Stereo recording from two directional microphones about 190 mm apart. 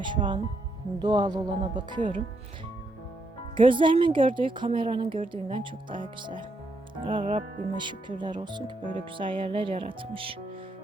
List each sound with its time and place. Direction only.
0.0 s speech: 25° right (ahead or behind)
3.6 s speech: 25° right (ahead or behind)